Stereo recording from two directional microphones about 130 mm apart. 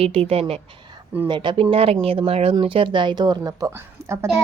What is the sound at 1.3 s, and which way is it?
Speech, 40° right (ahead or behind).